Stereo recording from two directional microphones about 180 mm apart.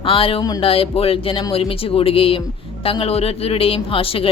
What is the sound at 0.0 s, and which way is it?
Speech, 30° left (ahead or behind).